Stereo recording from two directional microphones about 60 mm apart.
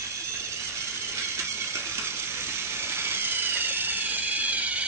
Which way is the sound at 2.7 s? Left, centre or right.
Right.